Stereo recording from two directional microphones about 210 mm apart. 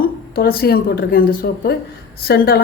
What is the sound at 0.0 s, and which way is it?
A woman's voice, 45° left (ahead or behind).